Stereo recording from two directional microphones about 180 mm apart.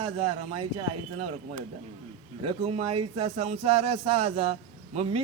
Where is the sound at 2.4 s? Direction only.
30° right (ahead or behind).